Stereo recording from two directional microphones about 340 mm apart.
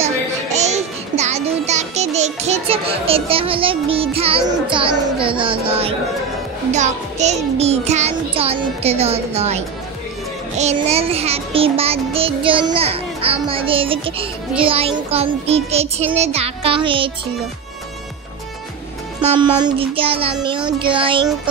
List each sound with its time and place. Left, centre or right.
0.0 s music: centre
19.4 s music: centre